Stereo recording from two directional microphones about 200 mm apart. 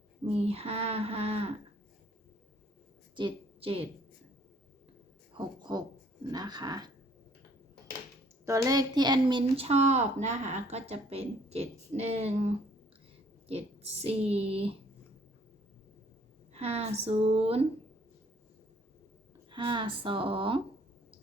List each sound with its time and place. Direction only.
0.3 s speech: 30° right (ahead or behind)
3.2 s a woman's voice: 25° right (ahead or behind)
5.3 s speech: 20° right (ahead or behind)
8.4 s speech: 15° right (ahead or behind); by 12.5 s 30° right (ahead or behind)
14.0 s speech: 30° right (ahead or behind)
16.6 s speech: 30° right (ahead or behind)
19.5 s speech: 25° right (ahead or behind)